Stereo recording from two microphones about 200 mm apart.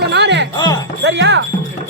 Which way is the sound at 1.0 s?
60° right (ahead or behind).